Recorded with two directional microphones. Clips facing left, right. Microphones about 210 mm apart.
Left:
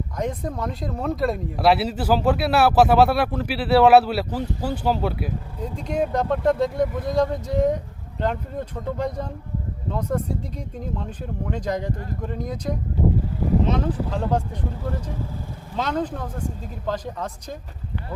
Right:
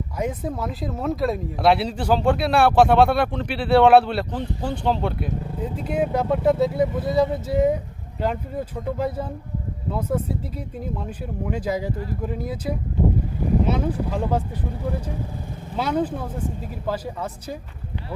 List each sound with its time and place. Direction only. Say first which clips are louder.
0.2 s speech: right 1 dB; 5° right (ahead or behind)
15.7 s speech: right 2 dB; 10° right (ahead or behind)